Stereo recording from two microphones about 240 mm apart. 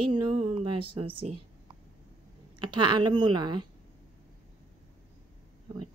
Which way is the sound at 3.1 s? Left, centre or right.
Centre.